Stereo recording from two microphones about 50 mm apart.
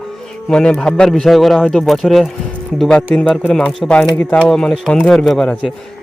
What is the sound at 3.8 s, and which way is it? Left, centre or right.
Speech, left.